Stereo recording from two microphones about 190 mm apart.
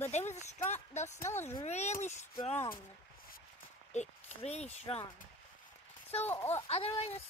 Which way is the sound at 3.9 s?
35° left (ahead or behind).